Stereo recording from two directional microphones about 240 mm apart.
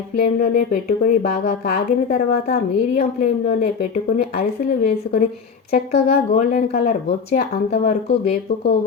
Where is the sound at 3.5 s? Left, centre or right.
Left.